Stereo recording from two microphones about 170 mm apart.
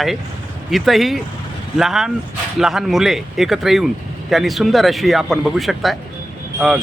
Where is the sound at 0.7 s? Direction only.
Centre (ahead or behind).